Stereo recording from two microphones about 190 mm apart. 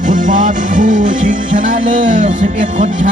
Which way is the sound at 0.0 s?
45° right (ahead or behind).